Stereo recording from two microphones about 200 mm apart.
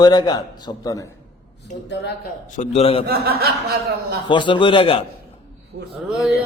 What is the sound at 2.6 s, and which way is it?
Speech, 30° left (ahead or behind).